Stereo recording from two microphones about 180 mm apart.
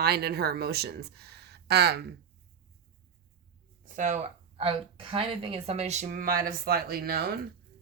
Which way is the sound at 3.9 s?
40° right (ahead or behind).